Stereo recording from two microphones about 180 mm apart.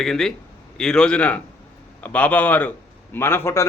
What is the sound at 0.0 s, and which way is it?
A man's voice, 5° left (ahead or behind).